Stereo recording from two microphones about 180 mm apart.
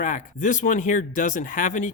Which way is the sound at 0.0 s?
45° left (ahead or behind).